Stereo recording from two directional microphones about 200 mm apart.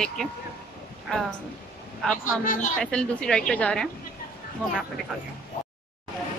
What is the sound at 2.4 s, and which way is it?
Speech, 40° left (ahead or behind).